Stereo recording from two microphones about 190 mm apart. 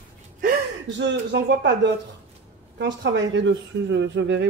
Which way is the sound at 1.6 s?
70° right (ahead or behind).